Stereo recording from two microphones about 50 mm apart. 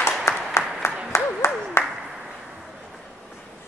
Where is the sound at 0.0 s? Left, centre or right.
Left.